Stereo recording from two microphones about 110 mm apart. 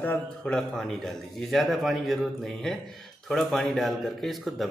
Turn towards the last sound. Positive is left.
turn(degrees=0)  # may be behind; listen again after turning